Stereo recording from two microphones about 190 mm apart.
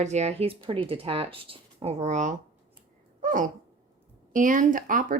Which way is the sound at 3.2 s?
45° right (ahead or behind).